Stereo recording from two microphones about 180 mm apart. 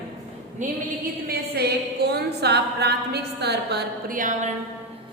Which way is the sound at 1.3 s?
65° right (ahead or behind).